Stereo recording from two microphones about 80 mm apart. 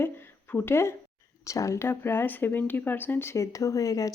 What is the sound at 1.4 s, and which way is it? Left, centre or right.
Speech, left.